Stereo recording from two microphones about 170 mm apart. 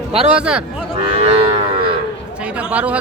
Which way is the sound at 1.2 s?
35° right (ahead or behind).